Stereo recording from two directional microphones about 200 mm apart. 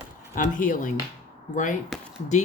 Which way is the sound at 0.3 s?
40° left (ahead or behind).